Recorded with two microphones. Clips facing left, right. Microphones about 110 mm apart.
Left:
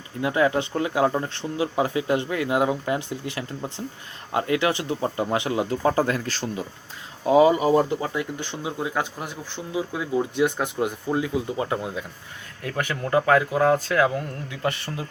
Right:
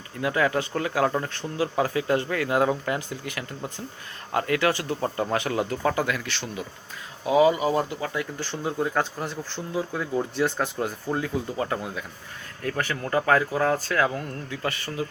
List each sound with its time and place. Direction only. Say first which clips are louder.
0.2 s speech: left 2 dB; 25° left (ahead or behind)
8.8 s speech: right 2 dB; 10° left (ahead or behind)
14.7 s speech: even; 25° left (ahead or behind)